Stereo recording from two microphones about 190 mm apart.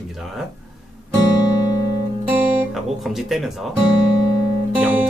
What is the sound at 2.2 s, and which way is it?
Speech, 5° right (ahead or behind).